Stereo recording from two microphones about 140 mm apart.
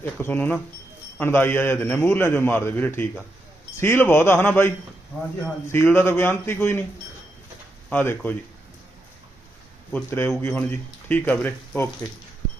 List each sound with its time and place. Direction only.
0.0 s speech: 15° left (ahead or behind)
7.9 s speech: 10° left (ahead or behind)
9.9 s speech: 15° left (ahead or behind)